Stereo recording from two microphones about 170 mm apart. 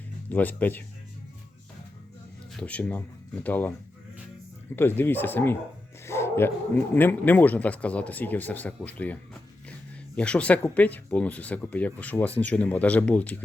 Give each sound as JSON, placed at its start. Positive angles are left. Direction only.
{"t": 0.3, "sound": "speech", "side_deg": 10}
{"t": 2.5, "sound": "speech", "side_deg": 5}
{"t": 4.7, "sound": "speech", "side_deg": 15}
{"t": 10.2, "sound": "speech", "side_deg": 5}